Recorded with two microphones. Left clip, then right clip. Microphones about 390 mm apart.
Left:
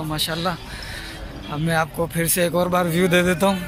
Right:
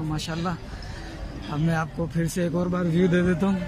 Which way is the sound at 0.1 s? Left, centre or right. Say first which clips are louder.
Left 9 dB; centre.